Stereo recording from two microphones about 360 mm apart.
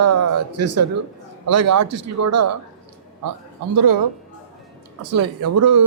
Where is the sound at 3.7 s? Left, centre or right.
Right.